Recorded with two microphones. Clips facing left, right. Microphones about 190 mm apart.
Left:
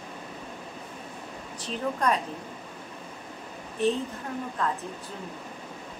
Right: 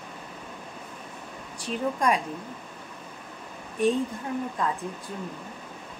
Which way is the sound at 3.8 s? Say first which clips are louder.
Right 2 dB; 10° right (ahead or behind).